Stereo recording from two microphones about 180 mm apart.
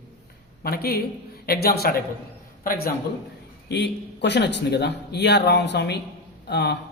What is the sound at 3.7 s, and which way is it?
A man's voice, 70° left (ahead or behind).